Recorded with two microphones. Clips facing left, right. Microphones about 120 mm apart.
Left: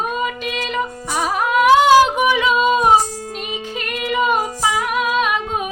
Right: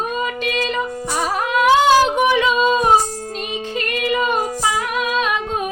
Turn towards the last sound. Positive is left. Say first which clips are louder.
# left 1 dB
turn(degrees=5)  # may be behind; listen again after turning